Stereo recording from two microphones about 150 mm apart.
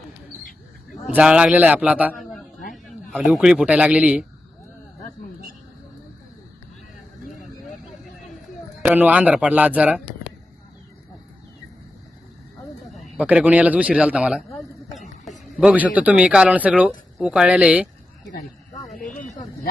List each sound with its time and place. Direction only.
1.1 s a man's voice: 10° right (ahead or behind)
8.8 s a man's voice: 10° right (ahead or behind)
13.1 s a man's voice: 10° right (ahead or behind)
18.9 s a sound: 65° left (ahead or behind)